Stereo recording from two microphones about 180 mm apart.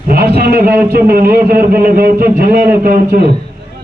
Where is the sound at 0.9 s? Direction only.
55° right (ahead or behind).